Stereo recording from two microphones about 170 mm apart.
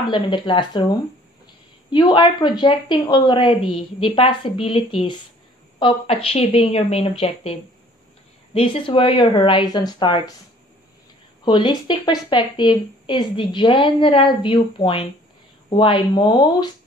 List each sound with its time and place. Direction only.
0.0 s a woman's voice: 30° left (ahead or behind)
8.5 s speech: 30° left (ahead or behind)
11.4 s speech: 25° left (ahead or behind)